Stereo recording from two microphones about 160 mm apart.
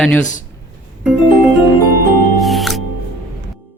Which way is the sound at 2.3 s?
Centre (ahead or behind).